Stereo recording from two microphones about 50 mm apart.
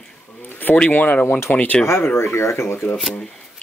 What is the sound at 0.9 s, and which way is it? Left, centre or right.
Speech, left.